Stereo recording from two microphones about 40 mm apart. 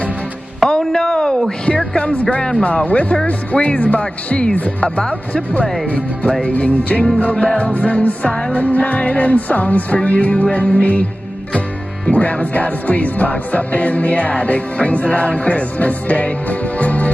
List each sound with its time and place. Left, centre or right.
0.7 s a sound: centre
2.5 s music: left
4.8 s speech: left
5.5 s music: left
12.1 s music: left